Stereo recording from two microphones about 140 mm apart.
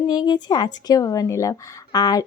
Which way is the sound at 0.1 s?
30° left (ahead or behind).